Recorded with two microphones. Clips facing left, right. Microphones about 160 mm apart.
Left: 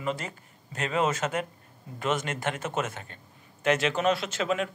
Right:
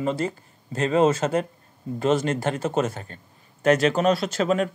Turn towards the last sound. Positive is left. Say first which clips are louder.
# right 6 dB
turn(degrees=-40)  # may be behind; listen again after turning